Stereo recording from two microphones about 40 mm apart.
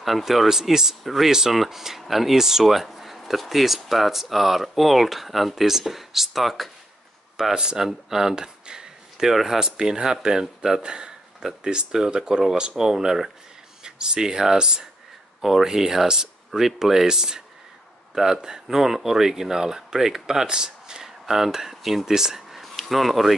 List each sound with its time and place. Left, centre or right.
0.0 s speech: centre
1.3 s speech: centre
7.5 s speech: centre
18.7 s speech: centre
22.6 s a sound: centre